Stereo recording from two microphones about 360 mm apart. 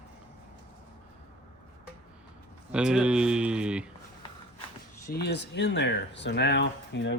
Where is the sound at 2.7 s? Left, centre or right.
Centre.